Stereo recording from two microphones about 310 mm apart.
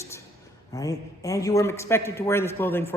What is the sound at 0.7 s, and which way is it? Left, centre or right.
A man's voice, centre.